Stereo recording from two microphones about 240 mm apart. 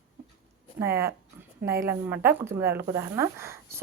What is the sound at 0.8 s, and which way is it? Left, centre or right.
Speech, centre.